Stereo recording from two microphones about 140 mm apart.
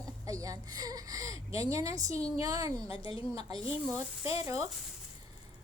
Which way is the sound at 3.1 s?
40° left (ahead or behind).